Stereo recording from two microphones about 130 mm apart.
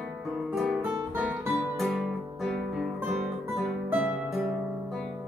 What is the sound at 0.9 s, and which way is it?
Music, 15° right (ahead or behind).